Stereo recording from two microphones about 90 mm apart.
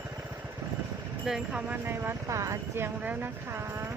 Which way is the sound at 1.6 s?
20° right (ahead or behind).